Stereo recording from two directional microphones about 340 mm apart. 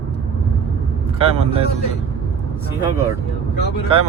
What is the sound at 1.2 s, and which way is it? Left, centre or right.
Speech, centre.